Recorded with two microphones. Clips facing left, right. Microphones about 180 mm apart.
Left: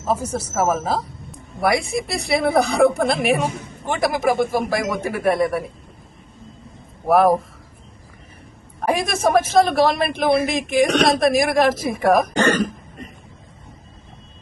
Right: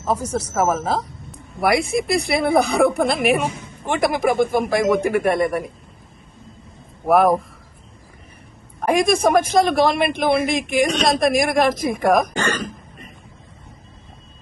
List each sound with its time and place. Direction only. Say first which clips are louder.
0.1 s speech: even; 5° left (ahead or behind)
7.1 s speech: even; centre (ahead or behind)
8.9 s speech: right 2 dB; centre (ahead or behind)
10.9 s speech: left 2 dB; 60° left (ahead or behind)
11.2 s speech: left 1 dB; centre (ahead or behind)
12.3 s speech: left 5 dB; 45° left (ahead or behind)